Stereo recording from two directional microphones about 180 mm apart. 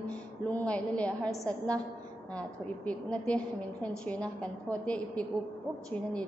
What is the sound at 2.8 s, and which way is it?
A woman's voice, 5° left (ahead or behind).